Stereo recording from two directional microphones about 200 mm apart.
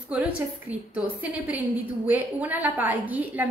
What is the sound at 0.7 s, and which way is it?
A woman's voice, 5° right (ahead or behind).